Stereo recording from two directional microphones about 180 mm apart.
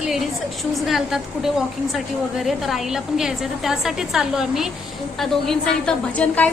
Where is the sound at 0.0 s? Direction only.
Centre (ahead or behind).